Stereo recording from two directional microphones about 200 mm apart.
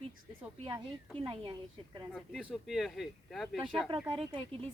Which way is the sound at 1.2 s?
20° right (ahead or behind).